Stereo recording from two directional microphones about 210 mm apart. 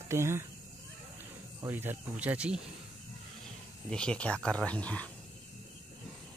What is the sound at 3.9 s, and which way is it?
Speech, 5° left (ahead or behind).